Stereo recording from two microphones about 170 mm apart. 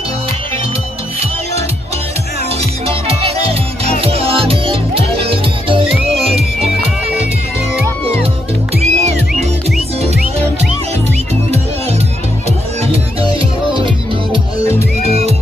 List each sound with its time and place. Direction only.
2.9 s music: 35° right (ahead or behind)
8.8 s music: 40° right (ahead or behind)
12.8 s music: 35° right (ahead or behind)